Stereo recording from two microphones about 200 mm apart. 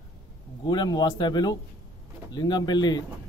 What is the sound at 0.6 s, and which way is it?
Speech, 20° left (ahead or behind).